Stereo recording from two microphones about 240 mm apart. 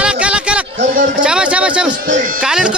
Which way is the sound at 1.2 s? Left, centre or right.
Centre.